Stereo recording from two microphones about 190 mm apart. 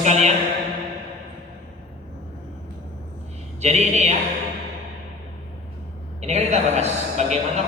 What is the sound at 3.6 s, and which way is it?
Speech, 35° right (ahead or behind).